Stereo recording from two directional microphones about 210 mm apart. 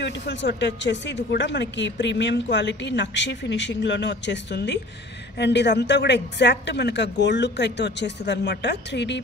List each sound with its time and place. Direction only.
0.0 s speech: 55° left (ahead or behind)